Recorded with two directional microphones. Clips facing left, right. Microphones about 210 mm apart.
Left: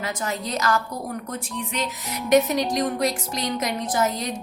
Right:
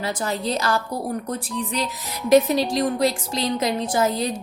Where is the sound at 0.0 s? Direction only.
30° right (ahead or behind).